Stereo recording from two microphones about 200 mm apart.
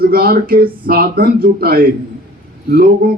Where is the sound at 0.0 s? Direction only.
50° right (ahead or behind).